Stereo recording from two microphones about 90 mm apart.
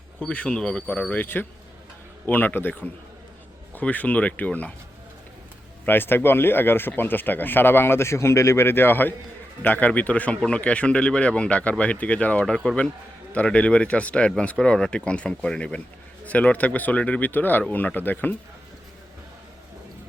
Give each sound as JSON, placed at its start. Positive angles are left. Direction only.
{"t": 0.2, "sound": "speech", "side_deg": 15}
{"t": 1.2, "sound": "speech", "side_deg": 20}
{"t": 5.8, "sound": "speech", "side_deg": 25}